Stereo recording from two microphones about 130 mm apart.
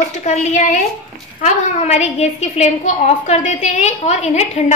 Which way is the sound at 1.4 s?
60° left (ahead or behind).